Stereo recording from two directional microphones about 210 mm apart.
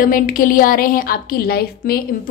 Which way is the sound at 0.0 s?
40° left (ahead or behind).